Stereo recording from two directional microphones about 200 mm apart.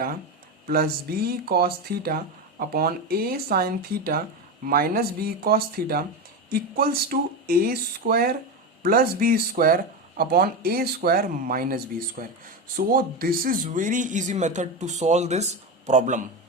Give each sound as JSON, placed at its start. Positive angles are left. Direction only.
{"t": 0.7, "sound": "speech", "side_deg": -50}